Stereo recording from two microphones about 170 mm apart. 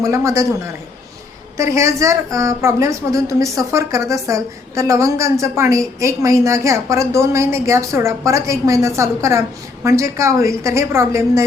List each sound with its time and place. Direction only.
0.0 s a woman's voice: 15° right (ahead or behind)